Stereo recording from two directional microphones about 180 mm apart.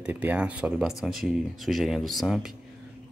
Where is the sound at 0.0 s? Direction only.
10° right (ahead or behind).